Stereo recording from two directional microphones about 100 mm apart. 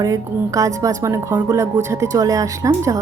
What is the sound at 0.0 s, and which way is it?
A woman's voice, 35° right (ahead or behind).